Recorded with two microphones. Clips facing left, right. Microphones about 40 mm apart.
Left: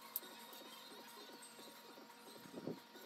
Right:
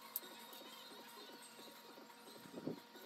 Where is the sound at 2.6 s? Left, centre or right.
Centre.